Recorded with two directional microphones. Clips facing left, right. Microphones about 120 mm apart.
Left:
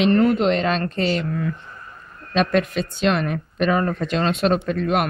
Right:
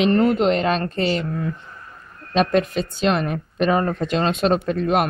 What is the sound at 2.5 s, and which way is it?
Speech, 25° right (ahead or behind).